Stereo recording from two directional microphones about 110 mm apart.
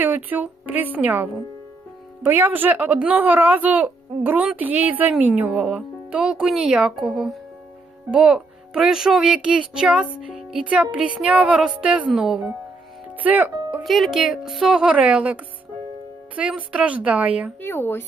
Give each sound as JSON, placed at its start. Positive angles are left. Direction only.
{"t": 0.0, "sound": "speech", "side_deg": -15}
{"t": 10.2, "sound": "music", "side_deg": -5}
{"t": 10.9, "sound": "speech", "side_deg": -10}
{"t": 13.8, "sound": "speech", "side_deg": 0}
{"t": 17.6, "sound": "speech", "side_deg": 20}